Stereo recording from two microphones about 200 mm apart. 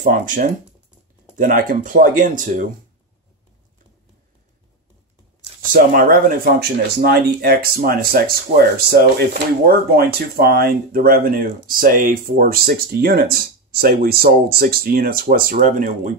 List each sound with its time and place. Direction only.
0.0 s speech: 40° right (ahead or behind)
5.7 s speech: 45° right (ahead or behind)